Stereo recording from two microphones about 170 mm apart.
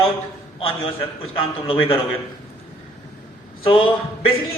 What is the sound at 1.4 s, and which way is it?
Speech, 35° left (ahead or behind).